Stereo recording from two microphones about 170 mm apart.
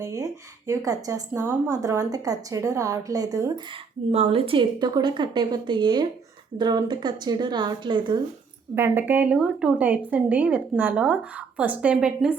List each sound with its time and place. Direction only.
0.0 s a woman's voice: 20° right (ahead or behind)
4.1 s a woman's voice: 35° right (ahead or behind)
8.7 s a woman's voice: 10° right (ahead or behind)